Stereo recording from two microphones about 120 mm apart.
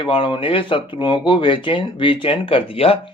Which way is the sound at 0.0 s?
45° left (ahead or behind).